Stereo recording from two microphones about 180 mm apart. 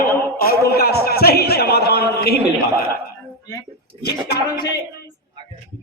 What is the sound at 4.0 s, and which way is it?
Speech, 65° left (ahead or behind).